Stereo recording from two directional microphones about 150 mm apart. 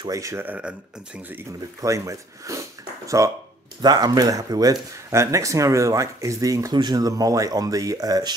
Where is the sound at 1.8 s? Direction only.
20° right (ahead or behind).